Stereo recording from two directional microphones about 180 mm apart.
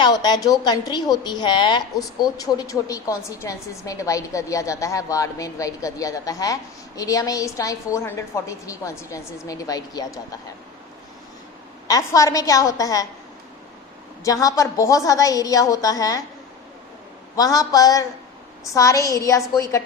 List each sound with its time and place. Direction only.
0.0 s a woman's voice: 25° left (ahead or behind)
11.9 s a woman's voice: 20° left (ahead or behind)
14.3 s a woman's voice: 20° left (ahead or behind)
17.3 s a woman's voice: 20° left (ahead or behind)